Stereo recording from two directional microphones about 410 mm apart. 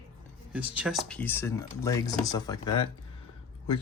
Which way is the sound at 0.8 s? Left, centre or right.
Centre.